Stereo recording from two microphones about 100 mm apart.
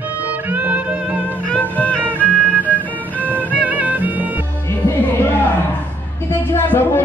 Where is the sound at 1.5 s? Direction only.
15° left (ahead or behind).